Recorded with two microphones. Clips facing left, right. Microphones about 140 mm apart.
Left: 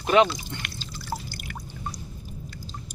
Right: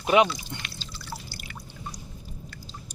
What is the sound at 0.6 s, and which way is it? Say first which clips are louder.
Drip: left 3 dB; 50° left (ahead or behind).